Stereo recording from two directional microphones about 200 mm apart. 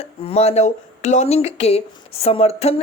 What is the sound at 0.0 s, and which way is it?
Speech, 30° left (ahead or behind).